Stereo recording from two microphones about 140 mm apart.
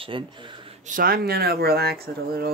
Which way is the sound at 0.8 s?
80° right.